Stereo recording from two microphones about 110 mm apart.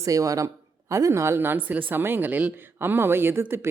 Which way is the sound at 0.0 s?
30° right (ahead or behind).